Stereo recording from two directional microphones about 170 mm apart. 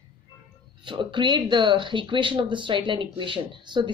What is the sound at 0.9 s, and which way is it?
Speech, 30° right (ahead or behind).